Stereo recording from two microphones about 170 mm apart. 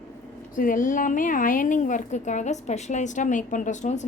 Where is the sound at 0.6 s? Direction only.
55° left (ahead or behind).